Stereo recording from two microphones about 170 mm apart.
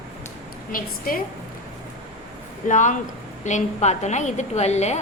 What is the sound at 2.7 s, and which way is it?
A woman's voice, 45° left (ahead or behind).